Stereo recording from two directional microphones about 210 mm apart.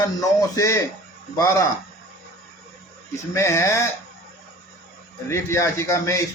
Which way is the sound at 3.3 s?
15° left (ahead or behind).